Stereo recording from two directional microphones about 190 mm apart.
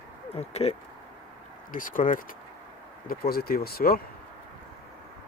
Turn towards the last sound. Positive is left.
turn(degrees=55)  # may be behind; listen again after turning